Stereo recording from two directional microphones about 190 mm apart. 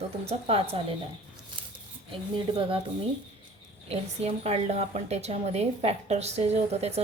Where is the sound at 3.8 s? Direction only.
30° right (ahead or behind).